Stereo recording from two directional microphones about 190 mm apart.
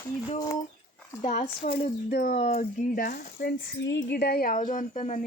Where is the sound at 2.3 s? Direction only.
35° left (ahead or behind).